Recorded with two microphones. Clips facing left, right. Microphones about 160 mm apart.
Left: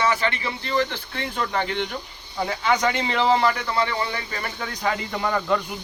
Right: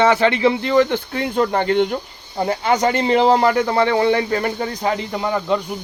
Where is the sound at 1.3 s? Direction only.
45° right (ahead or behind); by 4.5 s 60° right (ahead or behind).